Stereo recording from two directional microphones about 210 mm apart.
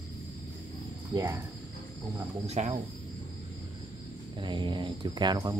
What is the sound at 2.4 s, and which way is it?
Speech, 30° right (ahead or behind).